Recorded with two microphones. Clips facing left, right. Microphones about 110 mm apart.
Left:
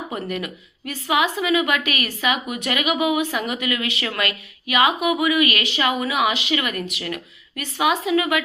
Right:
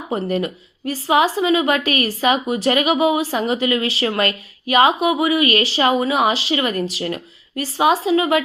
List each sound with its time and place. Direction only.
0.1 s speech: 30° right (ahead or behind)